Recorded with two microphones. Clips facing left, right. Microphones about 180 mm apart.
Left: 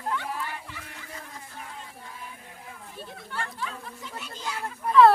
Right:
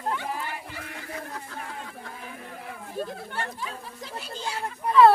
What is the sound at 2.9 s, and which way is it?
Speech, 40° right (ahead or behind).